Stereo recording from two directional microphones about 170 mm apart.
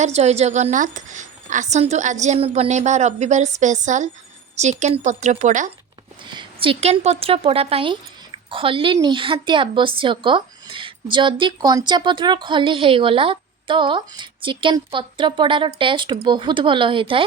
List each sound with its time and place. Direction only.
0.0 s a woman's voice: 40° right (ahead or behind)
6.2 s speech: 30° right (ahead or behind)